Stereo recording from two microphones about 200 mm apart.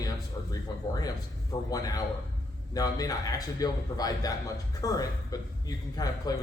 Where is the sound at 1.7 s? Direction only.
20° left (ahead or behind).